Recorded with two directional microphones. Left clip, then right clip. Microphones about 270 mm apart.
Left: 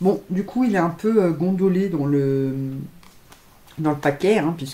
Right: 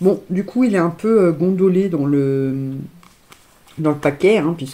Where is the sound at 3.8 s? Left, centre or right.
Centre.